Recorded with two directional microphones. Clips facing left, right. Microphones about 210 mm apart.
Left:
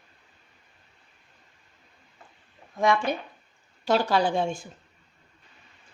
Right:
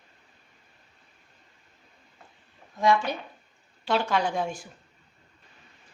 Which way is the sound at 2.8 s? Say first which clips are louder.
Even; 50° left (ahead or behind).